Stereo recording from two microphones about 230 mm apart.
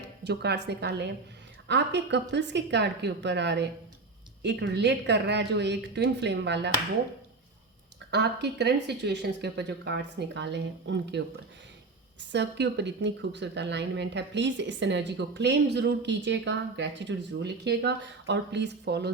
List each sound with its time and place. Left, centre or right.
0.3 s speech: right
8.1 s speech: right
12.3 s speech: right